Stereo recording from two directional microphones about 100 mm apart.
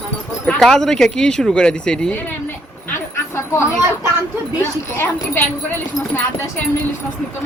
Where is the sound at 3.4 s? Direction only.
30° left (ahead or behind).